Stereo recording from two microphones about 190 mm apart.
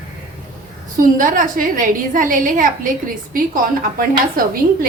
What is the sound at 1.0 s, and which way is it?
A woman's voice, 45° right (ahead or behind).